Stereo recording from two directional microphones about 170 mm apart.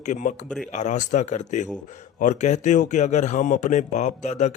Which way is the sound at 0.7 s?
45° left (ahead or behind).